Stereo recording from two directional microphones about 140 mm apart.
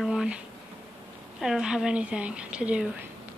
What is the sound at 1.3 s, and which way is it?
A woman's voice, 5° right (ahead or behind).